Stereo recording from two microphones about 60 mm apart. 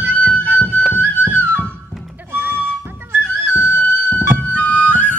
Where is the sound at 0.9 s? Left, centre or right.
Left.